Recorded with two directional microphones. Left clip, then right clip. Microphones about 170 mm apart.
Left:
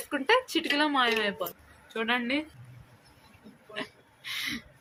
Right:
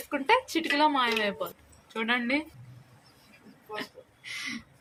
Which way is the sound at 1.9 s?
15° right (ahead or behind).